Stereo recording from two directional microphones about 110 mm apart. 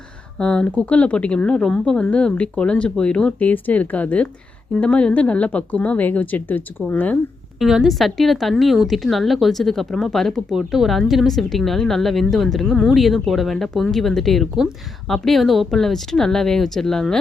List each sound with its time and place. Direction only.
0.3 s speech: 10° left (ahead or behind)
7.6 s a woman's voice: 5° right (ahead or behind)